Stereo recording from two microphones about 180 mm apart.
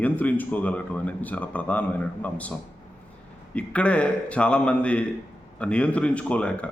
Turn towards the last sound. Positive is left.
turn(degrees=5)  # may be behind; listen again after turning